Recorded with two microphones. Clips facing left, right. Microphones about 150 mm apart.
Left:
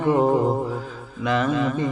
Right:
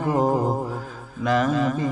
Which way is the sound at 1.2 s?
40° right (ahead or behind).